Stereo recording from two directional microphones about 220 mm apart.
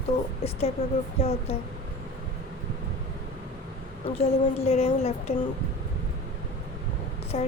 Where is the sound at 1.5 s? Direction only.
30° left (ahead or behind).